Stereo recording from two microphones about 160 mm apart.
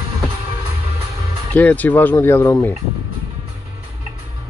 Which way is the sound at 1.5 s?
10° left (ahead or behind).